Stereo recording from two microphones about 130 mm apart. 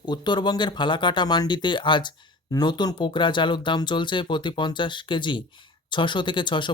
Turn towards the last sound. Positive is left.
turn(degrees=35)  # may be behind; listen again after turning